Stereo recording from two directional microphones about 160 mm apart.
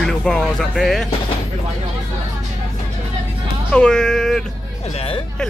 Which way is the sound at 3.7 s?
5° left (ahead or behind).